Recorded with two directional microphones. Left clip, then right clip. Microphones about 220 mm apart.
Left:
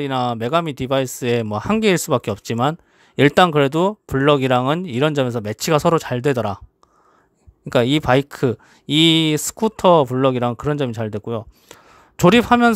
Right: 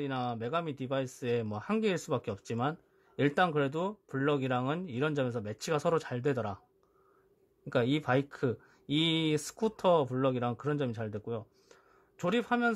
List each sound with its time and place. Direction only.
0.0 s speech: 35° left (ahead or behind)
7.7 s speech: 35° left (ahead or behind)